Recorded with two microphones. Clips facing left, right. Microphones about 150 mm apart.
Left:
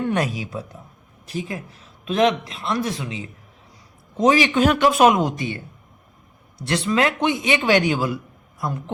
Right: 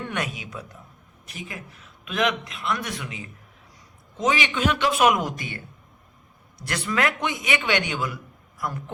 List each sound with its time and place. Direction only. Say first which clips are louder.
0.1 s a man's voice: left 7 dB; 35° left (ahead or behind)
4.2 s a man's voice: left 7 dB; 35° left (ahead or behind)
5.0 s a man's voice: left 5 dB; 25° left (ahead or behind)
6.7 s a man's voice: left 5 dB; 25° left (ahead or behind)